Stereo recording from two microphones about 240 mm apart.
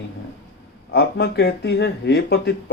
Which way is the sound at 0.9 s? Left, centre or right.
Left.